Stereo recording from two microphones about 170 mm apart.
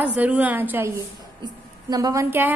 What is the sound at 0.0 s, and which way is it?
A woman's voice, 10° right (ahead or behind).